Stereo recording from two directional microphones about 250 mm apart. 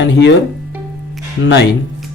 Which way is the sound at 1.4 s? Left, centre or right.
Left.